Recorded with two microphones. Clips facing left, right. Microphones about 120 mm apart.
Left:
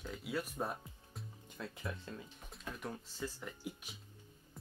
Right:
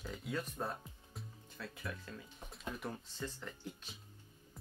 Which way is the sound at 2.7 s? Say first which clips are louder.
Left 2 dB; centre (ahead or behind).